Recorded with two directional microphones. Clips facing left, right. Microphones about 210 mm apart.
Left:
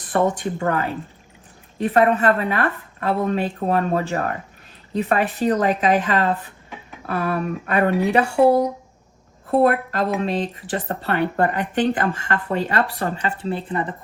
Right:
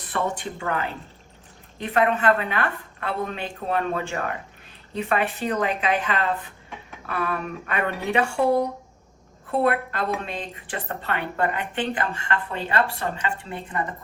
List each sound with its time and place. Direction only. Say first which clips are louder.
0.1 s speech: left 7 dB; 45° left (ahead or behind)
9.5 s speech: left 5 dB; 40° left (ahead or behind)